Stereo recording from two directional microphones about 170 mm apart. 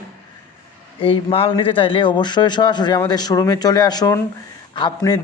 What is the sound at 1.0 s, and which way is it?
A man's voice, 30° left (ahead or behind).